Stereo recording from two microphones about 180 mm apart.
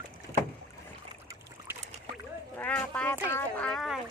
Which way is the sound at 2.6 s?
5° left (ahead or behind).